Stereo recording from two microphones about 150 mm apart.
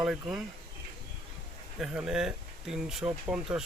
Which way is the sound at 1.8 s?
5° right (ahead or behind).